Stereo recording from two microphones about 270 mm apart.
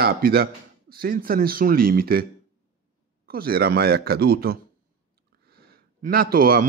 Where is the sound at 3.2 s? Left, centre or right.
Right.